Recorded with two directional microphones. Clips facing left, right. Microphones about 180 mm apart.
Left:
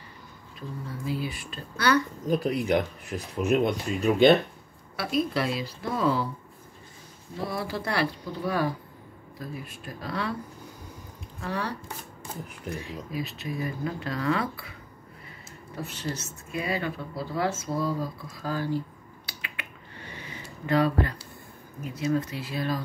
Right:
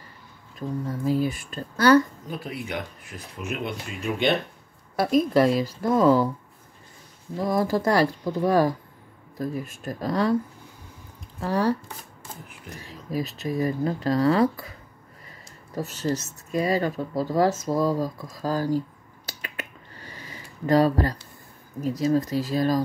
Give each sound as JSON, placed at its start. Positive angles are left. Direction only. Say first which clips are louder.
{"t": 0.6, "sound": "speech", "louder": "right 8 dB", "side_deg": -45}
{"t": 2.4, "sound": "speech", "louder": "left 5 dB", "side_deg": 40}
{"t": 4.9, "sound": "speech", "louder": "right 7 dB", "side_deg": -45}
{"t": 7.4, "sound": "speech", "louder": "right 9 dB", "side_deg": -45}
{"t": 11.4, "sound": "speech", "louder": "right 8 dB", "side_deg": -40}
{"t": 12.7, "sound": "speech", "louder": "right 5 dB", "side_deg": -40}
{"t": 19.2, "sound": "a sound", "louder": "right 6 dB", "side_deg": -40}
{"t": 21.8, "sound": "speech", "louder": "right 5 dB", "side_deg": -35}